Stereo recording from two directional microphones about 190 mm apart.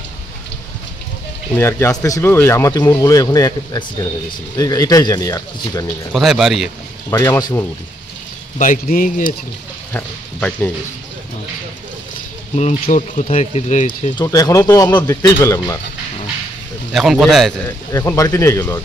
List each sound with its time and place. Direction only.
1.5 s speech: 15° left (ahead or behind)
6.1 s speech: centre (ahead or behind)
7.1 s speech: 20° left (ahead or behind)
8.5 s a man's voice: 45° left (ahead or behind)
9.9 s speech: 10° left (ahead or behind)
12.8 s speech: 40° left (ahead or behind)
14.1 s speech: 20° left (ahead or behind)
16.9 s speech: centre (ahead or behind)
17.6 s speech: 15° left (ahead or behind)